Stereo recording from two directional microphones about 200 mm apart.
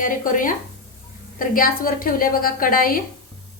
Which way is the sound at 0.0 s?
45° left (ahead or behind).